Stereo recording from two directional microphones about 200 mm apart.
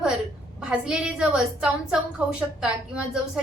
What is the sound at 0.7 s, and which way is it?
A woman's voice, 5° right (ahead or behind).